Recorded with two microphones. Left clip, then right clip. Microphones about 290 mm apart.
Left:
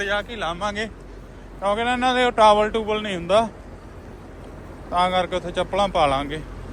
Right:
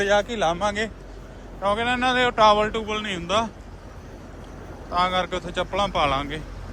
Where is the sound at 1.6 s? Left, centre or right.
Centre.